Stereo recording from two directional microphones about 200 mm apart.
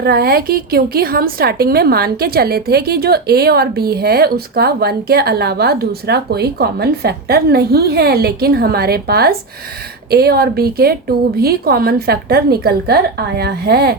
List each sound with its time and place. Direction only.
0.0 s a woman's voice: 50° right (ahead or behind)